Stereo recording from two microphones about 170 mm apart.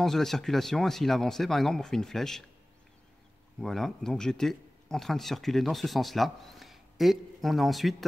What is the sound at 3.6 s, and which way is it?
Speech, centre (ahead or behind).